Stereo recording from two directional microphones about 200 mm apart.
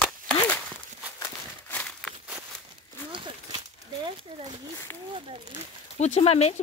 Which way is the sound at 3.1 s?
25° right (ahead or behind).